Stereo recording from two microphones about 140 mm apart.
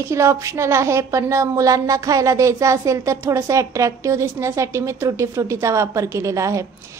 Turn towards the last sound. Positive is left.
turn(degrees=-25)  # may be behind; listen again after turning